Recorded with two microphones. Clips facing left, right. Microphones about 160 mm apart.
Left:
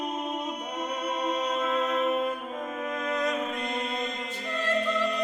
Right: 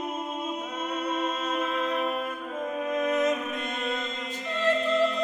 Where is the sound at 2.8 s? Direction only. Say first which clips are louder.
Right 5 dB; 20° right (ahead or behind).